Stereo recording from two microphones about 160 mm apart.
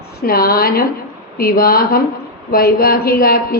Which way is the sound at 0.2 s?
70° left (ahead or behind).